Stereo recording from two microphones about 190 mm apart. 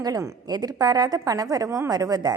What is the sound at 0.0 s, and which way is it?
A woman's voice, 15° right (ahead or behind).